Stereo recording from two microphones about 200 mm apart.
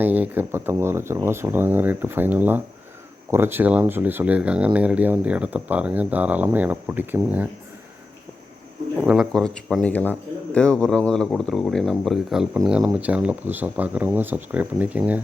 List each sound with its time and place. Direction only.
0.0 s speech: 10° right (ahead or behind)
9.0 s speech: 5° right (ahead or behind)